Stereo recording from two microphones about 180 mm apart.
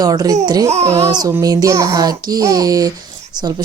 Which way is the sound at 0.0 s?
20° right (ahead or behind).